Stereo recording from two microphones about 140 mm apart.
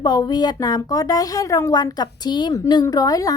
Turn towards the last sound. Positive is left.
turn(degrees=25)  # may be behind; listen again after turning